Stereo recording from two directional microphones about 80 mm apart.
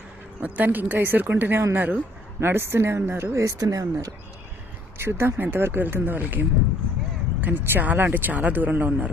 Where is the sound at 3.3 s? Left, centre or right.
Right.